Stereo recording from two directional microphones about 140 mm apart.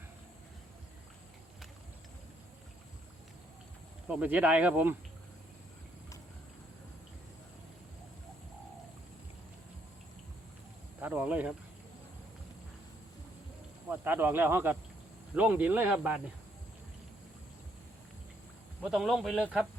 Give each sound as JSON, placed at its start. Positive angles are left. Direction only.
{"t": 4.1, "sound": "speech", "side_deg": -10}
{"t": 11.0, "sound": "speech", "side_deg": -10}
{"t": 13.9, "sound": "speech", "side_deg": -15}
{"t": 18.8, "sound": "a man's voice", "side_deg": -5}